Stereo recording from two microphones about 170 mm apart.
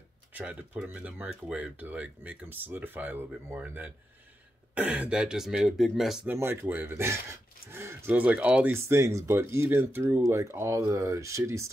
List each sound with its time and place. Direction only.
0.3 s speech: 10° right (ahead or behind)
6.3 s speech: 15° right (ahead or behind)